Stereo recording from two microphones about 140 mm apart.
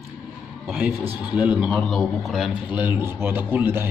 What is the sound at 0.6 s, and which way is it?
A man's voice, 5° right (ahead or behind).